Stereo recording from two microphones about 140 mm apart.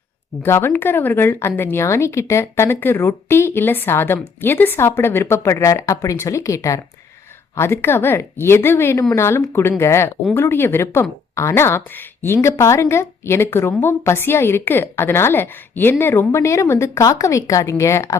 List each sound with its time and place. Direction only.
0.4 s a woman's voice: 15° left (ahead or behind)